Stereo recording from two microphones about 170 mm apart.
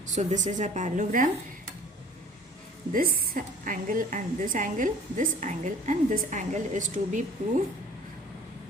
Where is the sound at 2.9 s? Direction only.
60° right (ahead or behind).